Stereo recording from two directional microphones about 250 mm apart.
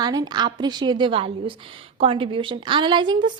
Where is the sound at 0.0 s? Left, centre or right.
Centre.